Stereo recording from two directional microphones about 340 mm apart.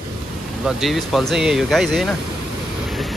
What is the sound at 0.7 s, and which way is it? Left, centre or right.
Speech, centre.